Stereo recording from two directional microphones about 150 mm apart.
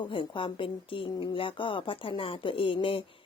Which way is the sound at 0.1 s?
35° left (ahead or behind).